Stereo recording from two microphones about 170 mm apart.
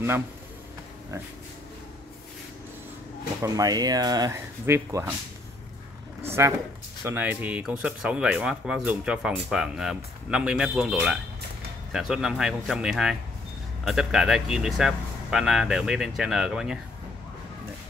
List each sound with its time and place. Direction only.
3.4 s speech: 20° right (ahead or behind)
6.2 s speech: 15° right (ahead or behind)